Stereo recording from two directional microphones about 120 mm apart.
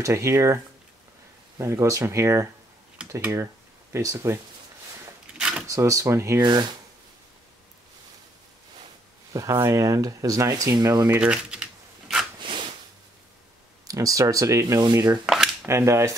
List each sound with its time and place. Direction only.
0.0 s speech: 25° right (ahead or behind)
1.6 s speech: 25° right (ahead or behind)
5.4 s a sound: 5° right (ahead or behind)
5.7 s speech: 25° right (ahead or behind)
6.4 s speech: 40° right (ahead or behind)
9.3 s speech: 25° right (ahead or behind)
11.1 s typing: 10° right (ahead or behind)
12.4 s a sound: 45° right (ahead or behind)
13.8 s speech: 30° right (ahead or behind)
15.2 s a sound: centre (ahead or behind)
15.6 s speech: 25° right (ahead or behind)